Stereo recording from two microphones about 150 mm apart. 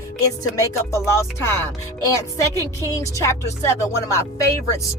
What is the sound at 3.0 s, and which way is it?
Speech, 20° left (ahead or behind).